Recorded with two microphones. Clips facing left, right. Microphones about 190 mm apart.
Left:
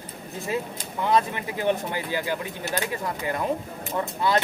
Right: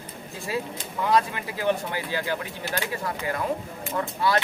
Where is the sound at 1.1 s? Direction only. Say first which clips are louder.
Left 1 dB; 20° left (ahead or behind).